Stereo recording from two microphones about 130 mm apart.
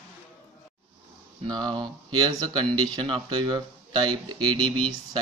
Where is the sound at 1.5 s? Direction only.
35° right (ahead or behind).